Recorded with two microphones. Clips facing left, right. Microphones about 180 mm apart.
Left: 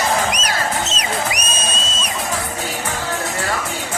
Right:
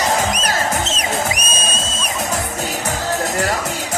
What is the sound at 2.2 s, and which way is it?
Music, 40° right (ahead or behind).